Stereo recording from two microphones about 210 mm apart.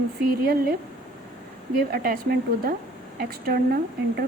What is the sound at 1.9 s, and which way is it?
Speech, 45° right (ahead or behind).